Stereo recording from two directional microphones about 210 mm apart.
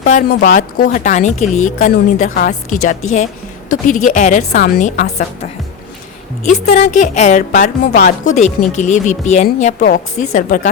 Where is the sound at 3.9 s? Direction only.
35° left (ahead or behind).